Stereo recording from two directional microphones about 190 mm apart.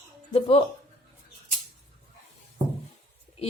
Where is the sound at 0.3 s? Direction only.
30° left (ahead or behind).